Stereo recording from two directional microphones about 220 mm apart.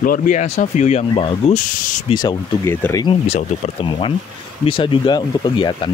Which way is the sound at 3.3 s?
30° left (ahead or behind).